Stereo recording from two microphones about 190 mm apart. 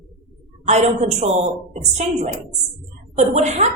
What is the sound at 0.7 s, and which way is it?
A woman's voice, 35° right (ahead or behind).